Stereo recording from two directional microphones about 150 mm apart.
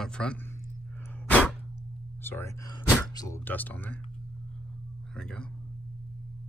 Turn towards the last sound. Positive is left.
turn(degrees=5)  # may be behind; listen again after turning